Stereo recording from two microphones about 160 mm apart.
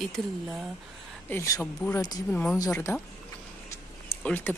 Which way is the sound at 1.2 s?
20° left (ahead or behind).